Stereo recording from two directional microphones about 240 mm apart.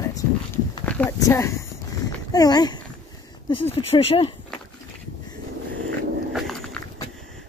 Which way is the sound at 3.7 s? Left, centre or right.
Left.